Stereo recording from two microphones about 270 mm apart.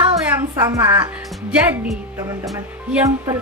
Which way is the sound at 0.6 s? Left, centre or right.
Centre.